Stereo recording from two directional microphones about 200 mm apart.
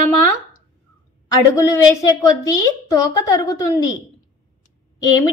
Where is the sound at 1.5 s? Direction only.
15° left (ahead or behind).